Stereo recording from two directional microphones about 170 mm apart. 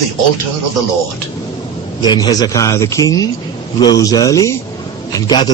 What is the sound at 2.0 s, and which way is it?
A man's voice, 25° left (ahead or behind).